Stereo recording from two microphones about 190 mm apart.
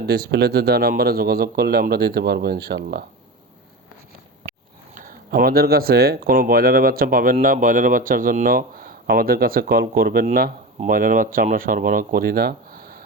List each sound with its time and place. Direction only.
0.0 s speech: 60° right (ahead or behind)
4.9 s speech: 50° right (ahead or behind)